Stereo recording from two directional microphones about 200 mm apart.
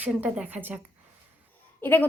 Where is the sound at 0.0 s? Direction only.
5° right (ahead or behind).